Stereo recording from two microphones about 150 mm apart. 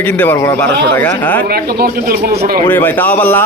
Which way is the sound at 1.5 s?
90° right.